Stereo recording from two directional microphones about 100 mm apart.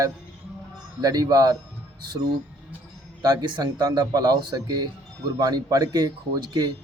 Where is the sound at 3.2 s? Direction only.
45° right (ahead or behind).